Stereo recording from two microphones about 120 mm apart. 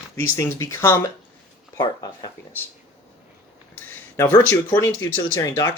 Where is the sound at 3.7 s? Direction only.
15° left (ahead or behind).